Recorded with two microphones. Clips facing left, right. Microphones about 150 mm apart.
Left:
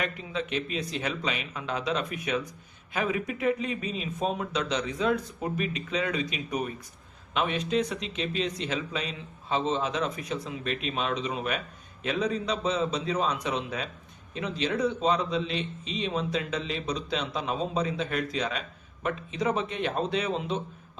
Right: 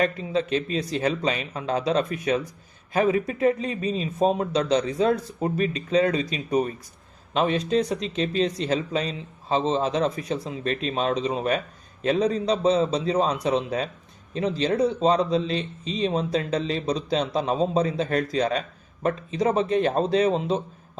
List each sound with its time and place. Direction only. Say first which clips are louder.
0.0 s speech: right 8 dB; 35° right (ahead or behind)